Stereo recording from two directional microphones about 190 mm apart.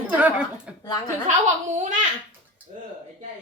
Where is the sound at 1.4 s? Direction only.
40° right (ahead or behind).